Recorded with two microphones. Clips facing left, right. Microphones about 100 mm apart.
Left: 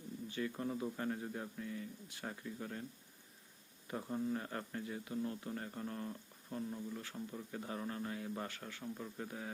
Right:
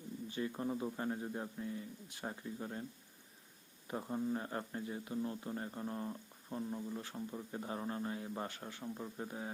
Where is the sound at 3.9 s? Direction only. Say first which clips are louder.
Right 1 dB; 20° right (ahead or behind).